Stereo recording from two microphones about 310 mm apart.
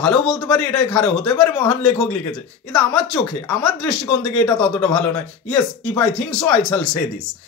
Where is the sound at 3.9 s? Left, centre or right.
Centre.